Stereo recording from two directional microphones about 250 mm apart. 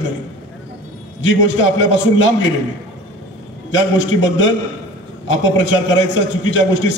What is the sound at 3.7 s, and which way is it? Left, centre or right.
A man's voice, left.